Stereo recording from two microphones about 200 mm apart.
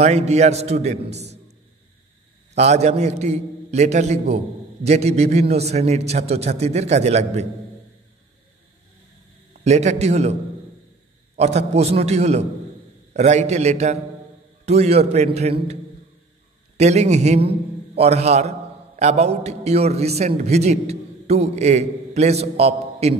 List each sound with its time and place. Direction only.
0.0 s a man's voice: 35° right (ahead or behind)
2.5 s a man's voice: 35° right (ahead or behind)
9.7 s a man's voice: 35° right (ahead or behind)
11.3 s a man's voice: 35° right (ahead or behind)